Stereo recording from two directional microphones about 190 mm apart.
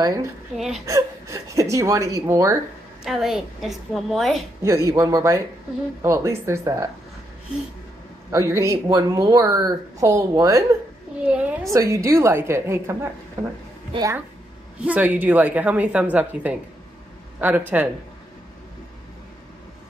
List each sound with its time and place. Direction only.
0.6 s a woman's voice: centre (ahead or behind)
0.8 s speech: 15° right (ahead or behind)
3.0 s a woman's voice: centre (ahead or behind)
4.6 s speech: 15° right (ahead or behind)
8.3 s speech: 15° right (ahead or behind)